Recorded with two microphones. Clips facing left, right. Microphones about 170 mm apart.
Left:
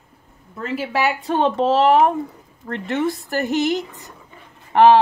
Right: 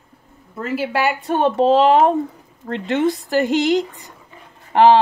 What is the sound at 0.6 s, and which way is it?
A woman's voice, 5° right (ahead or behind).